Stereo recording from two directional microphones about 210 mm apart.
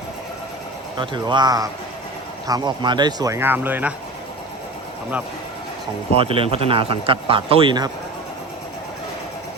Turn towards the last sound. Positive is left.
turn(degrees=-20)  # may be behind; listen again after turning